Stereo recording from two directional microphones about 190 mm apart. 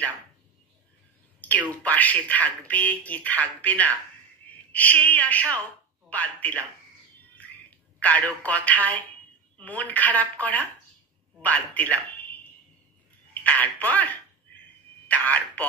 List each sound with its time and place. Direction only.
1.4 s a woman's voice: 10° left (ahead or behind)
8.0 s speech: 10° left (ahead or behind)